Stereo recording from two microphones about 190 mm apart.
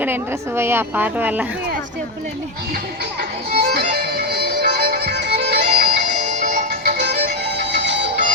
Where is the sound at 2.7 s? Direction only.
55° right (ahead or behind).